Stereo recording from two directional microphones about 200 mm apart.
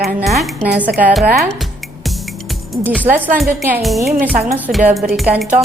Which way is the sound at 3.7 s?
Centre (ahead or behind).